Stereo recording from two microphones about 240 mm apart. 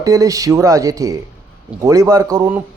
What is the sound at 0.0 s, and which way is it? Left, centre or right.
Speech, centre.